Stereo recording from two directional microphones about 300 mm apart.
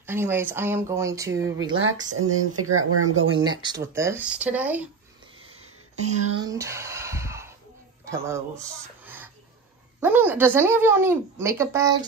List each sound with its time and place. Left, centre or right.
0.0 s speech: centre
1.7 s speech: right
3.3 s speech: centre
6.4 s a sound: centre
8.1 s speech: centre